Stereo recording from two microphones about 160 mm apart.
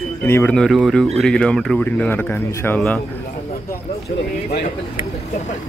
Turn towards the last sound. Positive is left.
turn(degrees=70)  # may be behind; listen again after turning